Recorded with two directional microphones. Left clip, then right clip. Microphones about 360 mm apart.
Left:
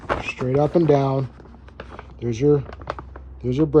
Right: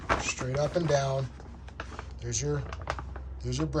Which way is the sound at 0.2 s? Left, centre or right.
Centre.